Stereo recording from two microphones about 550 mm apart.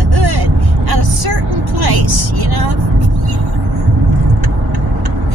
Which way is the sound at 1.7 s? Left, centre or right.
Right.